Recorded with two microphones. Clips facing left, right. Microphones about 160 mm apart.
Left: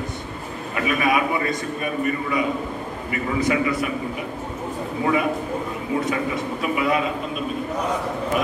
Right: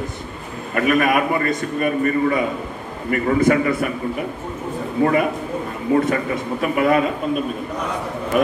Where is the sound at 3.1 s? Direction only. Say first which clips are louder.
Right 6 dB; 50° right (ahead or behind).